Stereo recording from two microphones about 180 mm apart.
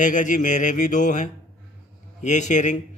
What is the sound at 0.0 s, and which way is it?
A man's voice, 45° left (ahead or behind).